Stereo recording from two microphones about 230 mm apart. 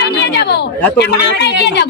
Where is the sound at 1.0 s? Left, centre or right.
Left.